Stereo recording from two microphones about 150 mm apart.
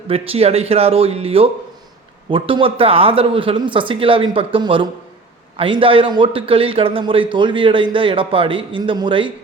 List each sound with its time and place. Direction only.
0.1 s a man's voice: 40° right (ahead or behind)